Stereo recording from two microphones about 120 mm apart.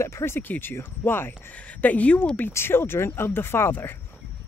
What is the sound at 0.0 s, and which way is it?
Speech, 20° left (ahead or behind).